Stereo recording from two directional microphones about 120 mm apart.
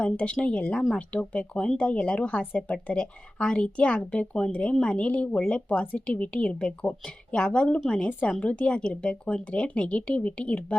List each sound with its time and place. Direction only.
0.0 s speech: 10° left (ahead or behind)